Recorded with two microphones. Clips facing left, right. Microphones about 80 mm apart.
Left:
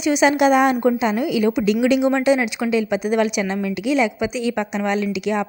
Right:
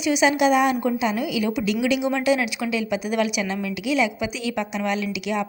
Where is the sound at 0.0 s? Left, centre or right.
Left.